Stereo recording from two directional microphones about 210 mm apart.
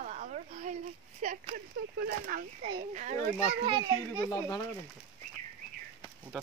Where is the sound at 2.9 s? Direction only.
35° right (ahead or behind).